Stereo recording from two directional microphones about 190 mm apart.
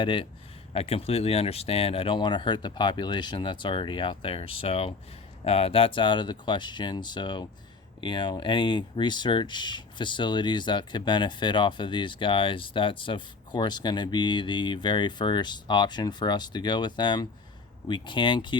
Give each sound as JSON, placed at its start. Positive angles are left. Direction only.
{"t": 0.0, "sound": "speech", "side_deg": 25}